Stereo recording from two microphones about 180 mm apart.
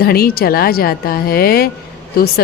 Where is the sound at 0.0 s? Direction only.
55° left (ahead or behind).